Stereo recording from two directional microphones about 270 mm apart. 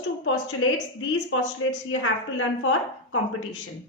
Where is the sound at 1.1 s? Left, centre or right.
Left.